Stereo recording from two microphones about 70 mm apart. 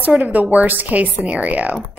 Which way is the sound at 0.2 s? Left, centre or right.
Right.